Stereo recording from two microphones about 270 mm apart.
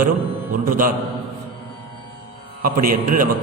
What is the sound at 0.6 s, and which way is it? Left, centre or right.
Speech, right.